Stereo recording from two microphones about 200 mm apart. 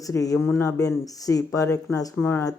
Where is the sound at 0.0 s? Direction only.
15° left (ahead or behind).